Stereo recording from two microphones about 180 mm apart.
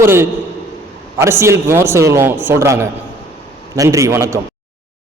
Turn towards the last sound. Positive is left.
turn(degrees=-15)  # may be behind; listen again after turning